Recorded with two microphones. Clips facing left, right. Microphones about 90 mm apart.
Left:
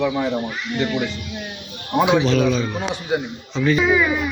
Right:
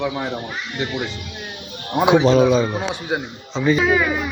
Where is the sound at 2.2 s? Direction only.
35° right (ahead or behind).